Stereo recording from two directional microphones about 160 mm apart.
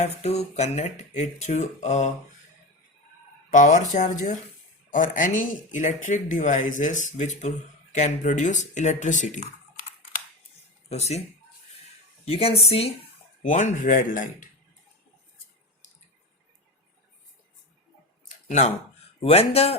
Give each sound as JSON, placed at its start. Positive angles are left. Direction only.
{"t": 0.0, "sound": "speech", "side_deg": 40}
{"t": 3.5, "sound": "speech", "side_deg": 50}
{"t": 10.8, "sound": "speech", "side_deg": 40}
{"t": 12.2, "sound": "speech", "side_deg": 35}
{"t": 18.3, "sound": "a sound", "side_deg": 50}
{"t": 19.2, "sound": "speech", "side_deg": 40}